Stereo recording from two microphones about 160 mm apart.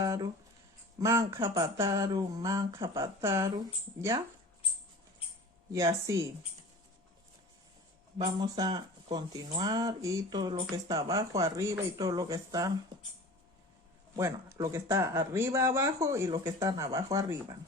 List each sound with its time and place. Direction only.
0.0 s a sound: 20° right (ahead or behind)
1.0 s speech: 20° right (ahead or behind)
5.7 s speech: 20° right (ahead or behind)
8.2 s speech: 25° right (ahead or behind)
14.2 s speech: 15° right (ahead or behind)